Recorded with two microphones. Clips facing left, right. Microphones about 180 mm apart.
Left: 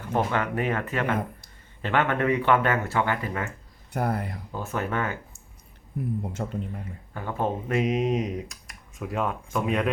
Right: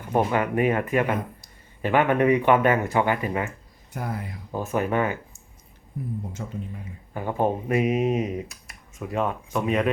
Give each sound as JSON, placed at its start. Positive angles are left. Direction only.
{"t": 0.1, "sound": "speech", "side_deg": -15}
{"t": 3.9, "sound": "speech", "side_deg": 60}
{"t": 4.5, "sound": "speech", "side_deg": -15}
{"t": 6.4, "sound": "speech", "side_deg": 55}
{"t": 7.1, "sound": "speech", "side_deg": -15}